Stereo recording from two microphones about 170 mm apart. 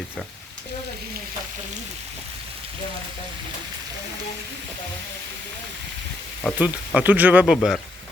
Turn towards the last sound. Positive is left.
turn(degrees=0)  # may be behind; listen again after turning